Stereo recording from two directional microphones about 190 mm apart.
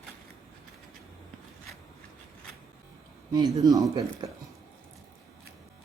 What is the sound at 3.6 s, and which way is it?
Speech, 15° right (ahead or behind).